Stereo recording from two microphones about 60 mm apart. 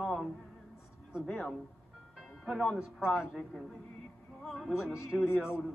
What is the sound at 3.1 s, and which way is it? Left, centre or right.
Speech, centre.